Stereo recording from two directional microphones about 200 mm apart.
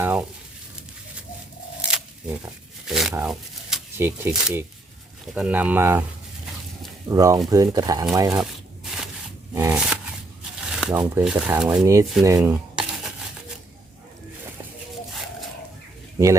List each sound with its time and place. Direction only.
0.0 s frying: 10° right (ahead or behind)
1.8 s tearing: 5° right (ahead or behind)
5.3 s speech: 5° right (ahead or behind)
7.1 s speech: 15° right (ahead or behind)
9.6 s a sound: 10° right (ahead or behind)
10.8 s crumpling: 5° right (ahead or behind)
11.2 s speech: 5° right (ahead or behind)